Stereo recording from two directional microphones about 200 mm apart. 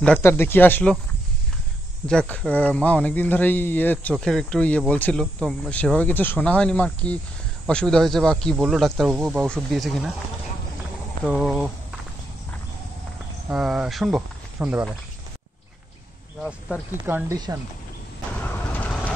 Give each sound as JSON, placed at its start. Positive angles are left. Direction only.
{"t": 0.2, "sound": "speech", "side_deg": 10}
{"t": 2.0, "sound": "speech", "side_deg": 5}
{"t": 11.2, "sound": "speech", "side_deg": 0}
{"t": 13.5, "sound": "speech", "side_deg": -5}
{"t": 16.4, "sound": "speech", "side_deg": 0}
{"t": 17.0, "sound": "speech", "side_deg": -15}
{"t": 18.4, "sound": "vehicle", "side_deg": 10}